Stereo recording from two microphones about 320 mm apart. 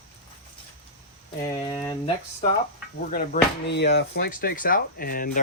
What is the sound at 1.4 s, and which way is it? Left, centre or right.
Speech, centre.